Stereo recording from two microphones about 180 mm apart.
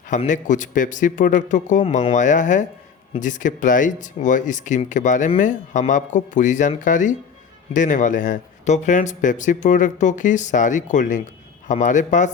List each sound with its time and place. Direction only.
0.1 s speech: 45° left (ahead or behind)